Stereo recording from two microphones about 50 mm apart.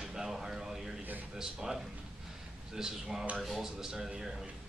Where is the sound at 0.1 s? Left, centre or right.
Centre.